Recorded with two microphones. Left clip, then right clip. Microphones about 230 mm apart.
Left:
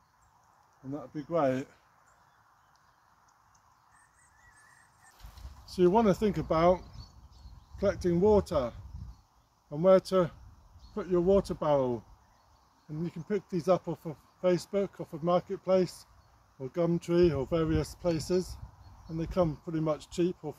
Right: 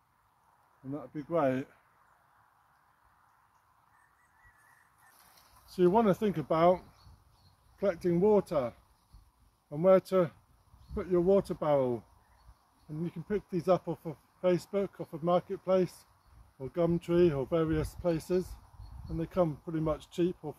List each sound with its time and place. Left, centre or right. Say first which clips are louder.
0.8 s speech: left 1 dB; centre
5.3 s speech: left 3 dB; centre
13.0 s speech: left 1 dB; centre